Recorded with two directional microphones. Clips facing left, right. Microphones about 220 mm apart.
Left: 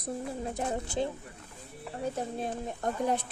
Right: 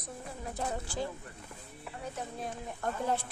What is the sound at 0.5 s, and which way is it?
Speech, 20° left (ahead or behind).